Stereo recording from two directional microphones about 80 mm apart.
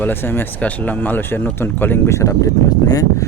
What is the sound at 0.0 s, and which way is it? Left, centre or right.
Speech, left.